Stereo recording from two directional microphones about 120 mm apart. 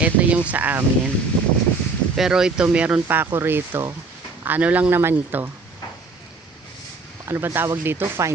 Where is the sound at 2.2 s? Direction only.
5° right (ahead or behind).